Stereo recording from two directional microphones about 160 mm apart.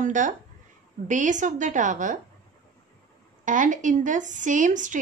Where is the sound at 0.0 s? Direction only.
50° right (ahead or behind).